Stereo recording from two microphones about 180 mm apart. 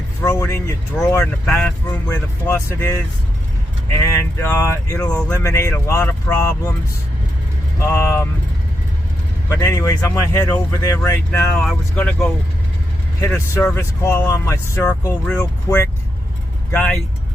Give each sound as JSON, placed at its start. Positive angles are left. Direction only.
{"t": 0.3, "sound": "speech", "side_deg": 15}
{"t": 3.9, "sound": "speech", "side_deg": 15}
{"t": 7.8, "sound": "speech", "side_deg": 15}
{"t": 9.5, "sound": "speech", "side_deg": 20}
{"t": 11.3, "sound": "speech", "side_deg": 5}